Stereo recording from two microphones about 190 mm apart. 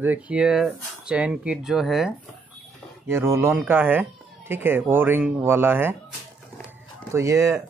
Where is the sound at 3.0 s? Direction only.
15° right (ahead or behind).